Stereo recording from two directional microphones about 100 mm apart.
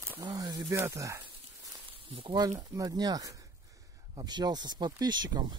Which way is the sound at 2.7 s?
40° right (ahead or behind).